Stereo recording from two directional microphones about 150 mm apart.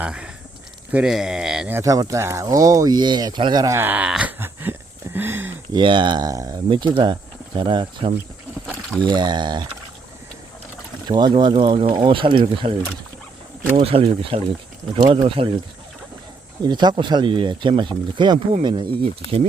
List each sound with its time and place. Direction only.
0.0 s speech: 5° right (ahead or behind)
1.8 s speech: 25° right (ahead or behind)
3.8 s wail: 10° right (ahead or behind)
5.1 s a sound: 15° right (ahead or behind)
5.7 s speech: 30° right (ahead or behind)
11.1 s speech: 30° right (ahead or behind)
13.7 s speech: 40° right (ahead or behind)
16.6 s speech: 30° right (ahead or behind)